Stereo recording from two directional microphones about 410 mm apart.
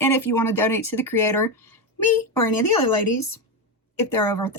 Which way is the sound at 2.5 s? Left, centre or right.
Left.